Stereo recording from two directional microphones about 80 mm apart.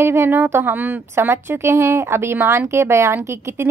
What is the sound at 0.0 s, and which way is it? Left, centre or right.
Speech, right.